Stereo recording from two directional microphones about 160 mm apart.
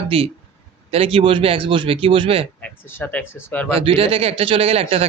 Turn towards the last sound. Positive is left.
turn(degrees=-40)  # may be behind; listen again after turning